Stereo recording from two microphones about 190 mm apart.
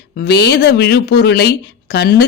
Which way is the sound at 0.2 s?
60° left (ahead or behind).